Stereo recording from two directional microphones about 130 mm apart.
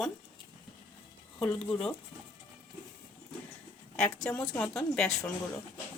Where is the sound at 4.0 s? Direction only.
10° left (ahead or behind).